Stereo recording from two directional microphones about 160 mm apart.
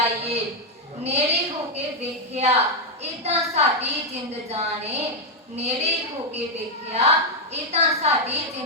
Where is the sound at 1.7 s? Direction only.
40° right (ahead or behind).